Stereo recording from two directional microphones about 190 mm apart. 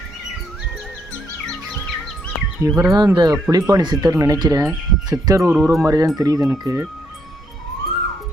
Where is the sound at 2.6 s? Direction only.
15° right (ahead or behind).